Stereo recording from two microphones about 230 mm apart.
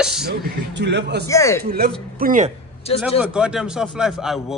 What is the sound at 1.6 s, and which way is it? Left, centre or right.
Speech, right.